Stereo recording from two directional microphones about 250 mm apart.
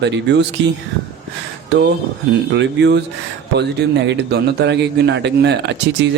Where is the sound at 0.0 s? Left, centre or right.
Right.